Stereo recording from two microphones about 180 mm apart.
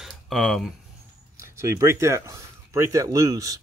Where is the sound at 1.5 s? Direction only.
15° right (ahead or behind).